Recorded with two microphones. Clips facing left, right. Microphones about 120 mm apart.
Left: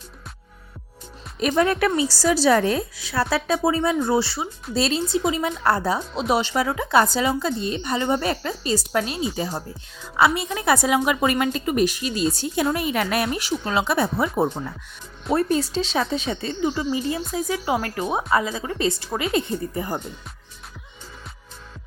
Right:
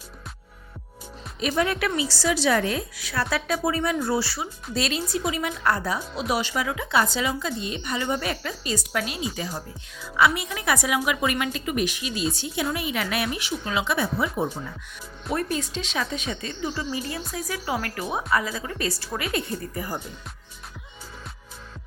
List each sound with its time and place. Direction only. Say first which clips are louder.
1.4 s a woman's voice: left 5 dB; 45° left (ahead or behind)
15.3 s a woman's voice: left 6 dB; 30° left (ahead or behind)